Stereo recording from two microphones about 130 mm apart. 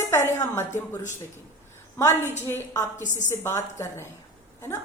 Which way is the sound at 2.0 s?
20° left (ahead or behind).